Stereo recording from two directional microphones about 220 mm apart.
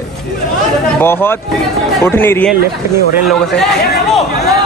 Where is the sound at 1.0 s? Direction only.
10° left (ahead or behind).